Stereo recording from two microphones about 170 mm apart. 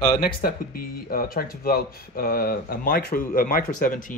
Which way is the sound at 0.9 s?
60° left (ahead or behind).